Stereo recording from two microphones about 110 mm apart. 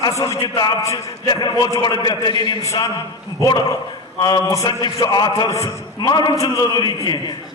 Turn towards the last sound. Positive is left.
turn(degrees=40)  # may be behind; listen again after turning